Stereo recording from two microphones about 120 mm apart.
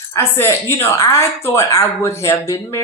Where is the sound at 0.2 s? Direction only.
20° left (ahead or behind).